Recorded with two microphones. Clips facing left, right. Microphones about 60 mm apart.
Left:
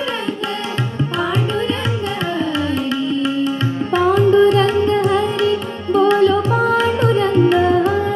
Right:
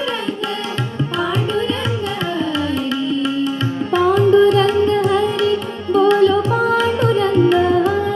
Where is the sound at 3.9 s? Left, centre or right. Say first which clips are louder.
Even; left.